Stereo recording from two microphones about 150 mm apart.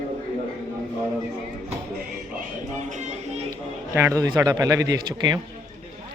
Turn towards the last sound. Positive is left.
turn(degrees=-30)  # may be behind; listen again after turning